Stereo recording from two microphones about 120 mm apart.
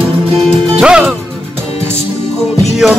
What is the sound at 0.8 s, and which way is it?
Music, 10° right (ahead or behind).